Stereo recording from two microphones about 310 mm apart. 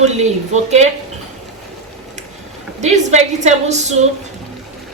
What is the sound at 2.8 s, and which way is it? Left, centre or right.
Speech, right.